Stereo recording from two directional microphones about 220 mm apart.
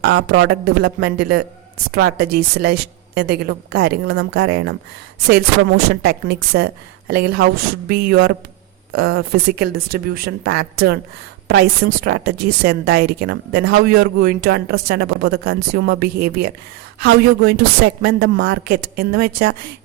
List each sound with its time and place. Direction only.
0.0 s speech: 45° right (ahead or behind)
5.7 s speech: 45° right (ahead or behind)